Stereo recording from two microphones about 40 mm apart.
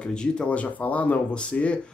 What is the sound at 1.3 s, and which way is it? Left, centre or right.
Speech, left.